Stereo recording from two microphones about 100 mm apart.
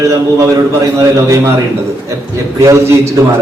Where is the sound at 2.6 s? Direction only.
30° right (ahead or behind).